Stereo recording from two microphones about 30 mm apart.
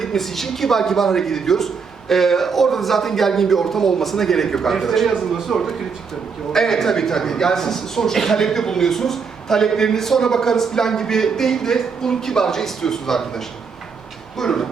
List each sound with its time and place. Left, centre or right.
0.2 s a man's voice: centre